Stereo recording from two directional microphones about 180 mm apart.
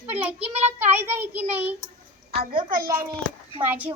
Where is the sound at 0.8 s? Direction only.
10° right (ahead or behind).